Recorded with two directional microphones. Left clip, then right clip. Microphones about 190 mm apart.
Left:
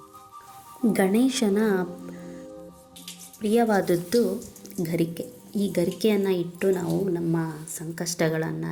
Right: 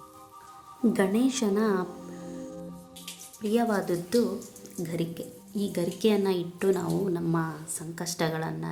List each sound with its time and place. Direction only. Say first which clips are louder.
0.9 s a woman's voice: left 4 dB; 20° left (ahead or behind)
3.5 s a woman's voice: left 5 dB; 20° left (ahead or behind)